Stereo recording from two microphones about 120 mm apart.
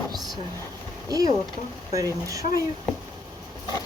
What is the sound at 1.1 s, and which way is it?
Speech, 30° right (ahead or behind).